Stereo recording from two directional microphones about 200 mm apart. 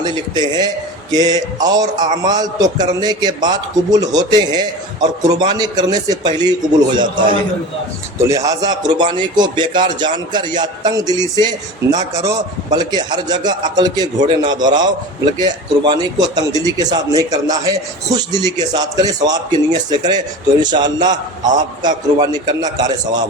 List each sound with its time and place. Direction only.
0.0 s a man's voice: 20° right (ahead or behind)